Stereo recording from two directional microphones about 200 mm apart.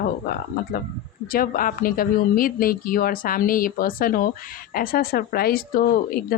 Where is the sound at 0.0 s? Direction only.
45° left (ahead or behind).